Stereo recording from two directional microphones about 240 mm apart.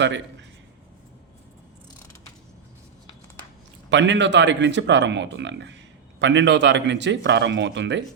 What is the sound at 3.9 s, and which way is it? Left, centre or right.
A man's voice, right.